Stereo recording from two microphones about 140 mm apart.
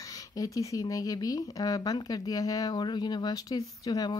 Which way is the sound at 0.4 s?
25° left (ahead or behind).